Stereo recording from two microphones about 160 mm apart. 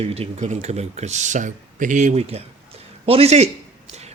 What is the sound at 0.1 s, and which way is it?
Speech, 45° right (ahead or behind).